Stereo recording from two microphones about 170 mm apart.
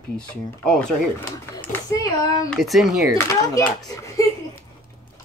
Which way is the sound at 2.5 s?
Centre (ahead or behind).